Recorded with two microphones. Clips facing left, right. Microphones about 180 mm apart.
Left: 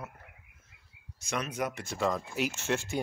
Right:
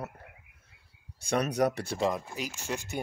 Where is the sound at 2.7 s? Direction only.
Centre (ahead or behind).